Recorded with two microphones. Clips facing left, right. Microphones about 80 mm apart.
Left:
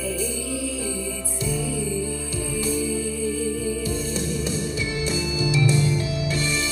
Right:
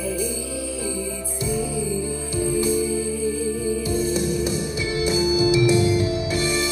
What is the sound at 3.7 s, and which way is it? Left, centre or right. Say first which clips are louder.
Music: right 4 dB; centre.